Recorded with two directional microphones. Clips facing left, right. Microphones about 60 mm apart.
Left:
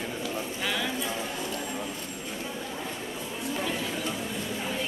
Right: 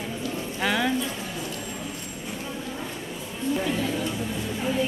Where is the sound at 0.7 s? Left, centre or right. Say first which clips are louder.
Right 7 dB; centre.